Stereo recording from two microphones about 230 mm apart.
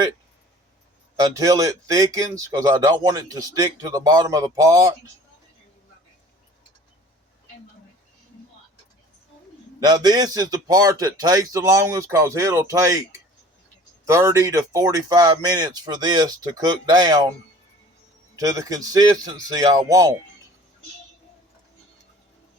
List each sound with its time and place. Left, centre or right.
1.1 s speech: centre
9.8 s speech: centre
14.0 s speech: centre
18.3 s speech: centre